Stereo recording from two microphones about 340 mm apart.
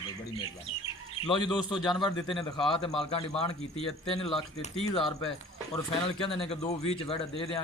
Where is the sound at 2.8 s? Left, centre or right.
Centre.